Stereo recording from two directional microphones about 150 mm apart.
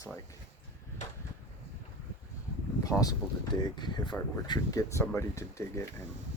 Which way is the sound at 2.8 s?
25° left (ahead or behind).